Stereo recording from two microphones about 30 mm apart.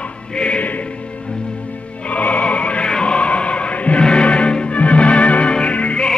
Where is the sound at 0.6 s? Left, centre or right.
Left.